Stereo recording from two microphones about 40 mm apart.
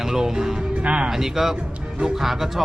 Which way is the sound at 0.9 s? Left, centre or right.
Right.